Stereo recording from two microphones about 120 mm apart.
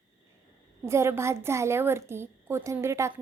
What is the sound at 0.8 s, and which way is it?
A woman's voice, 20° right (ahead or behind).